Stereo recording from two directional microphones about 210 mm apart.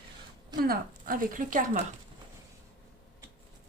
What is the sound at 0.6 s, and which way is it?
Speech, 45° right (ahead or behind).